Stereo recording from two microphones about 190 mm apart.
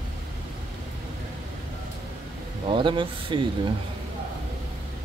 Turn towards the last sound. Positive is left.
turn(degrees=-25)  # may be behind; listen again after turning